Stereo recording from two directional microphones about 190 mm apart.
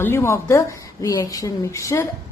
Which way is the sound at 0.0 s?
15° left (ahead or behind).